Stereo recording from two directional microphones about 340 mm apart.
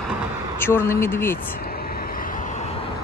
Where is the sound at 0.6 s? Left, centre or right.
Centre.